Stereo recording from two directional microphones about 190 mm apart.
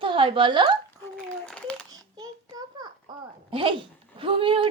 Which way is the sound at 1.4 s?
5° left (ahead or behind).